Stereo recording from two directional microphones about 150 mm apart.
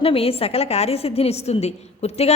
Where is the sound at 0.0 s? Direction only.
40° left (ahead or behind).